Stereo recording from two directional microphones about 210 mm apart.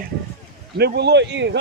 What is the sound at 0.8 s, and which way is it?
Speech, 55° right (ahead or behind).